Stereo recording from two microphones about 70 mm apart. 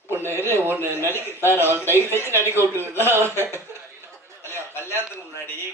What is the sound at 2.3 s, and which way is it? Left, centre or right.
Speech, right.